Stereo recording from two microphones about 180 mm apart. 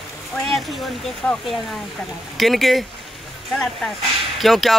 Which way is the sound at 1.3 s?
Centre (ahead or behind).